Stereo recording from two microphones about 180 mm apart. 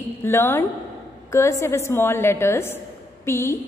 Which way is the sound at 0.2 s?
15° left (ahead or behind).